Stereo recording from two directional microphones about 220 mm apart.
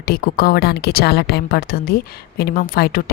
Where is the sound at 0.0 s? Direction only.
45° left (ahead or behind).